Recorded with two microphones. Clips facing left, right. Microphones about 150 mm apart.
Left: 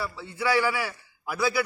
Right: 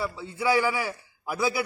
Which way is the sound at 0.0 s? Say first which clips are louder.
Right 2 dB; 20° right (ahead or behind).